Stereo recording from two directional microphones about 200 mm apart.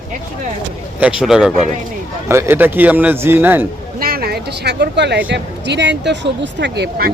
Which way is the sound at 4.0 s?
50° right (ahead or behind).